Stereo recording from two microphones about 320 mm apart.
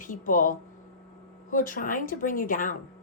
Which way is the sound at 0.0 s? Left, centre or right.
Left.